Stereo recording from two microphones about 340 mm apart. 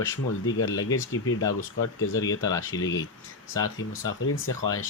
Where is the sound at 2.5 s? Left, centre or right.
Centre.